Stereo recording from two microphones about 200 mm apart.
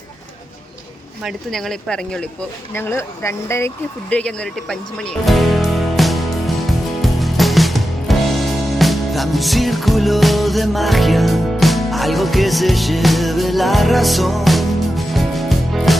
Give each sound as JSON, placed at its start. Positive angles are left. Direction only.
{"t": 1.2, "sound": "speech", "side_deg": 0}
{"t": 4.1, "sound": "music", "side_deg": 5}